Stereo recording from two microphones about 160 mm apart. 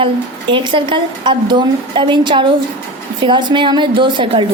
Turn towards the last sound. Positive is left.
turn(degrees=-30)  # may be behind; listen again after turning